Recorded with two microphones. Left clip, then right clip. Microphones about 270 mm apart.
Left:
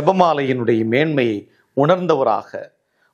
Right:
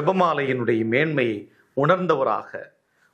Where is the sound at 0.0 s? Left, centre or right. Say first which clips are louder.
Left 5 dB; left.